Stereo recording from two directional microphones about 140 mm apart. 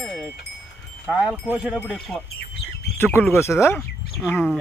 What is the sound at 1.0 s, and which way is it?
Speech, 5° right (ahead or behind).